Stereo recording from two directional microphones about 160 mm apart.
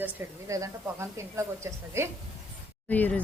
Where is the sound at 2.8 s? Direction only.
10° left (ahead or behind).